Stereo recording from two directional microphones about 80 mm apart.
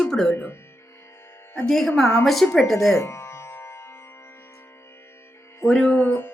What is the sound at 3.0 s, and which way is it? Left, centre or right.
Music, left.